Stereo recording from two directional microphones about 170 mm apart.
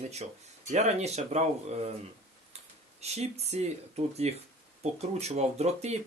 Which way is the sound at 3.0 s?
40° right (ahead or behind).